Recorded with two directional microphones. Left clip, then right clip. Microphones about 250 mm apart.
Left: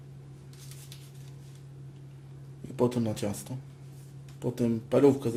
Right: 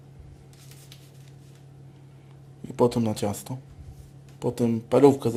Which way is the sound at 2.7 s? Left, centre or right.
Centre.